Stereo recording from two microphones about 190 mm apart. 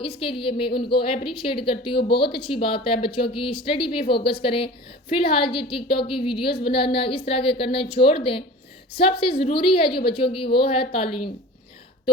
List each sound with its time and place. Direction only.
0.0 s a woman's voice: 30° left (ahead or behind)
2.0 s speech: 55° left (ahead or behind)
2.3 s a woman's voice: 30° left (ahead or behind)
6.5 s speech: 55° left (ahead or behind)
6.9 s a woman's voice: 30° left (ahead or behind)